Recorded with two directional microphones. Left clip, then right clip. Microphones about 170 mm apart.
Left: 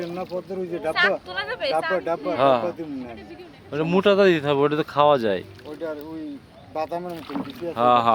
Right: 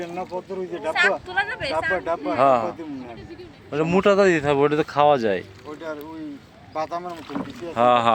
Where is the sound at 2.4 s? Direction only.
5° right (ahead or behind).